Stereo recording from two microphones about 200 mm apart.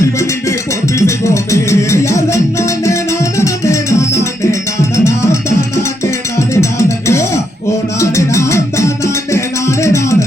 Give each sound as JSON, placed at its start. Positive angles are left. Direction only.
{"t": 0.9, "sound": "music", "side_deg": 15}